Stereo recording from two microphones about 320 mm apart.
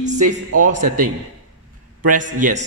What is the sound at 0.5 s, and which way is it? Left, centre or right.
Speech, right.